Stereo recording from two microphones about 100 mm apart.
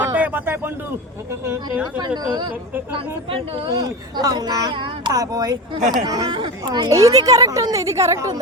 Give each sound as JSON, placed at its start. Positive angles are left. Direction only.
{"t": 0.0, "sound": "a sound", "side_deg": -20}
{"t": 2.0, "sound": "speech", "side_deg": -50}
{"t": 3.2, "sound": "speech", "side_deg": -65}
{"t": 3.7, "sound": "speech", "side_deg": -40}
{"t": 5.1, "sound": "a woman's voice", "side_deg": -40}